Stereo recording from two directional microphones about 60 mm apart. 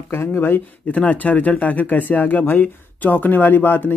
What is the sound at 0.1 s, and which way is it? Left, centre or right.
Speech, left.